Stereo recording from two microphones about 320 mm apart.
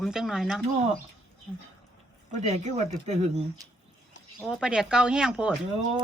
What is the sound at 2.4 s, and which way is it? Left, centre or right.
Speech, right.